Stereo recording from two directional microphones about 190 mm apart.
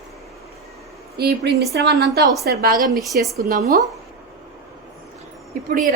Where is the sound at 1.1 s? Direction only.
55° right (ahead or behind).